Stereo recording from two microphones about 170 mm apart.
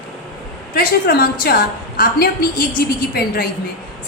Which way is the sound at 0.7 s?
60° left (ahead or behind).